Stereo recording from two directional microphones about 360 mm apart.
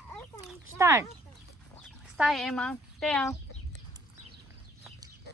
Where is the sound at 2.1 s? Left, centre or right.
Centre.